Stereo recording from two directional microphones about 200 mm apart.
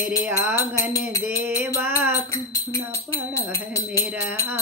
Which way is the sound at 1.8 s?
10° right (ahead or behind).